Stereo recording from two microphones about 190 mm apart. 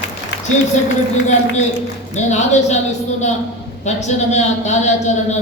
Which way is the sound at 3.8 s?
35° left (ahead or behind).